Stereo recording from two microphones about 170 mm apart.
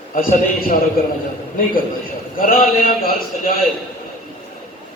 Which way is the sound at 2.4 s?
60° left (ahead or behind).